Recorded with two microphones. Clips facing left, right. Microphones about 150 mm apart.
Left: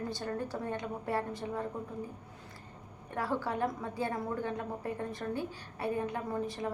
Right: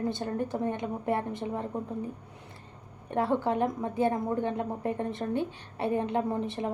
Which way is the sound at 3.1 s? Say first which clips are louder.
Right 7 dB; 20° right (ahead or behind).